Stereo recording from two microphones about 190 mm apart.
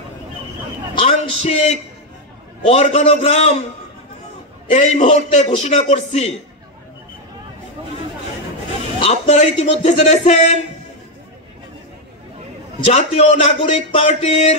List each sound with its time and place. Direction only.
0.9 s a man's voice: 30° left (ahead or behind)
4.6 s speech: 35° left (ahead or behind)
9.0 s speech: 30° left (ahead or behind)
12.8 s speech: 35° left (ahead or behind)